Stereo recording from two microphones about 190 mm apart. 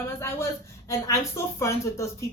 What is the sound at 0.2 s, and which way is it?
Speech, 15° left (ahead or behind).